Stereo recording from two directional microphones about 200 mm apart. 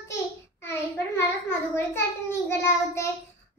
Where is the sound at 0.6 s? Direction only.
10° left (ahead or behind).